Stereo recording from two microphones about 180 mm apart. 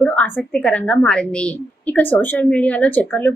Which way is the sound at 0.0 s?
5° left (ahead or behind).